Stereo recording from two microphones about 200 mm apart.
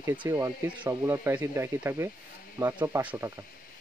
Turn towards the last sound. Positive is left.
turn(degrees=-10)  # may be behind; listen again after turning